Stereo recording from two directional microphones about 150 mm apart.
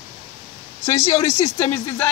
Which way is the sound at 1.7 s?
15° left (ahead or behind).